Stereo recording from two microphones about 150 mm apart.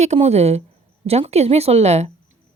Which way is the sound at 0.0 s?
45° right (ahead or behind).